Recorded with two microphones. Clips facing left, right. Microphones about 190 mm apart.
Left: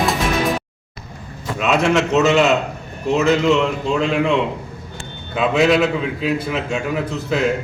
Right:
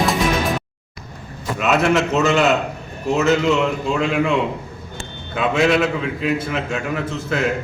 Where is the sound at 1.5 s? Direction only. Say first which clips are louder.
Even; 5° right (ahead or behind).